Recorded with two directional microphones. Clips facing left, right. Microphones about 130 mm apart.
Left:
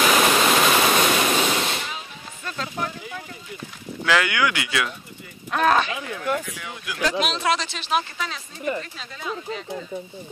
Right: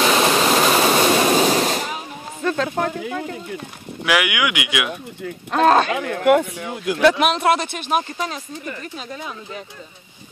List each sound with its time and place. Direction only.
0.0 s a sound: 30° right (ahead or behind)
2.4 s speech: 60° right (ahead or behind)
4.0 s speech: 15° right (ahead or behind)
5.5 s speech: 35° right (ahead or behind)
5.8 s speech: 55° right (ahead or behind)